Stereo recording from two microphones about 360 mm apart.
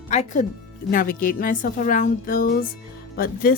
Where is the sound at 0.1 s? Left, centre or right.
Centre.